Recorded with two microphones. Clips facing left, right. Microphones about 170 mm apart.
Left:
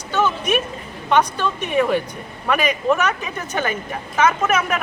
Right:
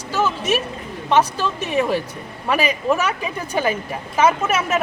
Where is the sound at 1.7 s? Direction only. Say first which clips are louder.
Left 2 dB; 30° right (ahead or behind).